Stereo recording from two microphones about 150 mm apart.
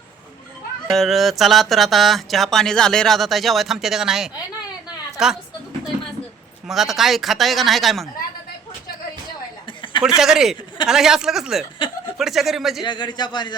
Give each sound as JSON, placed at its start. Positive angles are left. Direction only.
{"t": 0.9, "sound": "a woman's voice", "side_deg": 0}
{"t": 6.7, "sound": "speech", "side_deg": 0}
{"t": 10.2, "sound": "speech", "side_deg": -5}
{"t": 12.8, "sound": "speech", "side_deg": 30}